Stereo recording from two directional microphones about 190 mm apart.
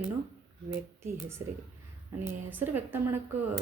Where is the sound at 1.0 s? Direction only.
15° right (ahead or behind).